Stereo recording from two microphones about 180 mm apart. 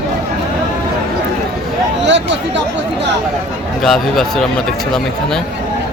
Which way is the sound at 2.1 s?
80° right.